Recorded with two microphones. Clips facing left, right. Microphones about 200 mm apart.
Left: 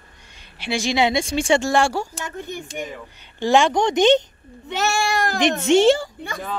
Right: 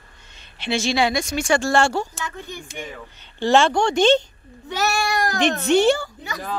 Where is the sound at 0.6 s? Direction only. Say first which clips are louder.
Even; 15° left (ahead or behind); by 1.6 s 30° left (ahead or behind).